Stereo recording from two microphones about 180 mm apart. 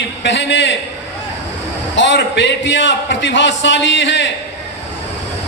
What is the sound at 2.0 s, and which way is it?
A man's voice, 85° left.